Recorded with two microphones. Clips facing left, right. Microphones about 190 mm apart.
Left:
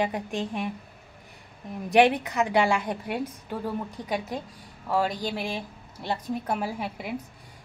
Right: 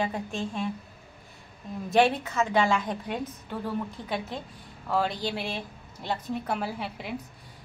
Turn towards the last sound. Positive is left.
turn(degrees=10)  # may be behind; listen again after turning